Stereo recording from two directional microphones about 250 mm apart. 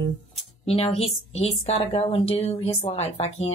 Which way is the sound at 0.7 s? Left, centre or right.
Left.